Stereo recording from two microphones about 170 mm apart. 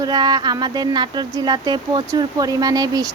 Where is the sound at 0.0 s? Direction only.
25° right (ahead or behind).